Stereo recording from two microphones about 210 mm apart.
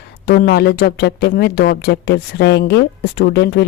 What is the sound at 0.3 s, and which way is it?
Speech, 50° left (ahead or behind).